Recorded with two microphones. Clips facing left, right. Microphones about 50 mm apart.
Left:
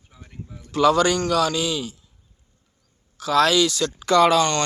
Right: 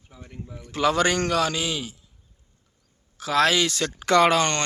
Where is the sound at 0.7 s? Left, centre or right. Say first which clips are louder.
Left 4 dB; right.